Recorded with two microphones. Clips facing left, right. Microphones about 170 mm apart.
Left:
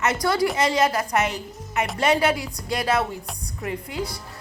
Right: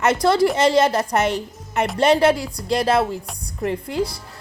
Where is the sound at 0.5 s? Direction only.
30° right (ahead or behind).